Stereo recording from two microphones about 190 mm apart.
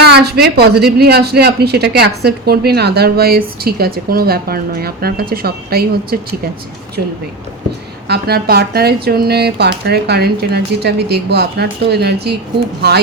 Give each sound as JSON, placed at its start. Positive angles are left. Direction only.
{"t": 0.0, "sound": "speech", "side_deg": -60}
{"t": 8.0, "sound": "speech", "side_deg": -55}